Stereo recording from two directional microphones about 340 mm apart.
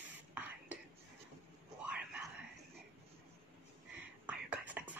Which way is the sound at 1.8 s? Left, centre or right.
Centre.